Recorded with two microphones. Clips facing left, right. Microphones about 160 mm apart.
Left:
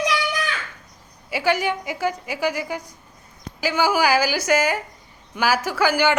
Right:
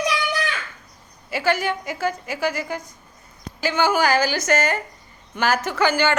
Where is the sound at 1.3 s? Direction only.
15° left (ahead or behind).